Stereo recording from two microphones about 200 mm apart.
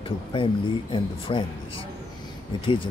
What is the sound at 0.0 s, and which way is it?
Speech, 25° left (ahead or behind).